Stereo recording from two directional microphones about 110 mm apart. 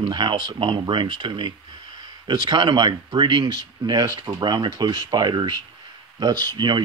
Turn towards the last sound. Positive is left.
turn(degrees=-40)  # may be behind; listen again after turning